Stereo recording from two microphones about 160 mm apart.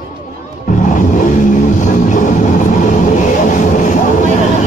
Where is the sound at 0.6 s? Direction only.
50° left (ahead or behind).